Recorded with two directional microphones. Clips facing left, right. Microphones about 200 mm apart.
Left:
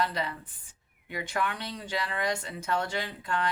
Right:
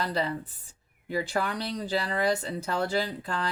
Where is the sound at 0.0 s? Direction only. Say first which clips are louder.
Right 2 dB; 35° right (ahead or behind).